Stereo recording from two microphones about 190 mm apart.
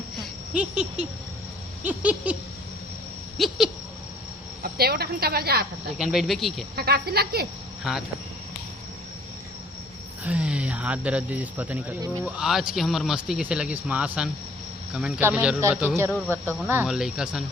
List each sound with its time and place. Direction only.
0.2 s a sound: 5° right (ahead or behind)
1.8 s speech: 10° right (ahead or behind)
3.3 s speech: centre (ahead or behind)
4.6 s a woman's voice: 55° right (ahead or behind)
6.0 s speech: centre (ahead or behind)
6.7 s a woman's voice: 55° right (ahead or behind)
10.2 s speech: 5° right (ahead or behind)